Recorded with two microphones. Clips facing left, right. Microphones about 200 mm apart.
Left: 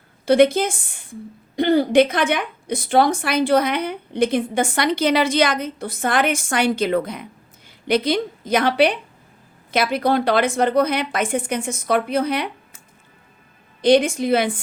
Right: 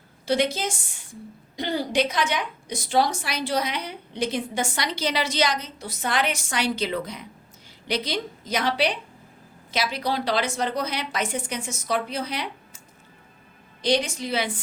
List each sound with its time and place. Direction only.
0.3 s a woman's voice: 55° left (ahead or behind)
13.8 s a woman's voice: 55° left (ahead or behind)